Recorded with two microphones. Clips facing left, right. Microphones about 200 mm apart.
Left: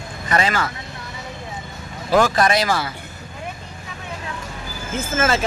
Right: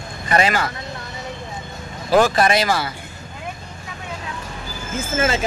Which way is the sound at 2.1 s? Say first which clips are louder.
Right 1 dB; 25° right (ahead or behind).